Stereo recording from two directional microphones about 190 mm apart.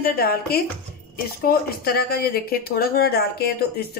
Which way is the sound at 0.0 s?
55° left (ahead or behind).